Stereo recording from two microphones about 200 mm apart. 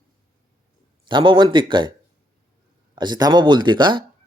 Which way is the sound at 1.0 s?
25° right (ahead or behind).